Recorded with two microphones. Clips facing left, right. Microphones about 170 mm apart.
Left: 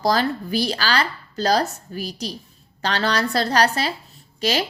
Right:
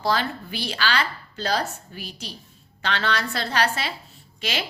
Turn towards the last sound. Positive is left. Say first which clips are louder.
# left 7 dB
turn(degrees=40)  # may be behind; listen again after turning